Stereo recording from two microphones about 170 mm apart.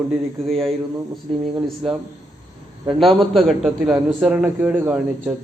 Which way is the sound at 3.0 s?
Centre (ahead or behind).